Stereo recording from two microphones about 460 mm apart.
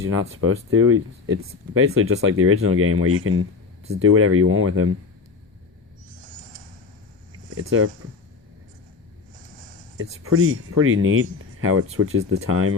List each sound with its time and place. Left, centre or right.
0.0 s speech: right
7.5 s speech: right
10.0 s speech: right